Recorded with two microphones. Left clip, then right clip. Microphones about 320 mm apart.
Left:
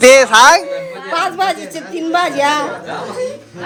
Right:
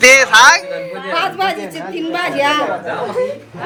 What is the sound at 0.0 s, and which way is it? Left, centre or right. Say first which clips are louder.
Speech: left 1 dB; centre.